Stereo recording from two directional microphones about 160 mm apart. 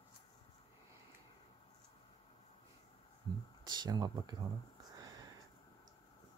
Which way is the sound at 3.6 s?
25° right (ahead or behind).